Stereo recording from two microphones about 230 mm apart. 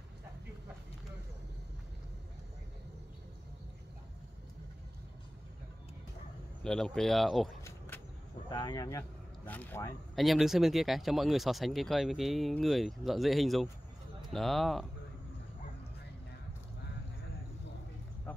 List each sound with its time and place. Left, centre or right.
6.6 s speech: centre
7.6 s insect: centre
8.5 s speech: centre
10.1 s speech: centre